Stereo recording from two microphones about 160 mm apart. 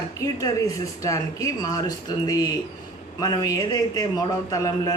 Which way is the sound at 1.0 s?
20° left (ahead or behind).